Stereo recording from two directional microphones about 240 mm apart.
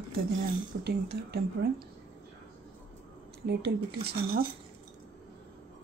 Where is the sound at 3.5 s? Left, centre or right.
Right.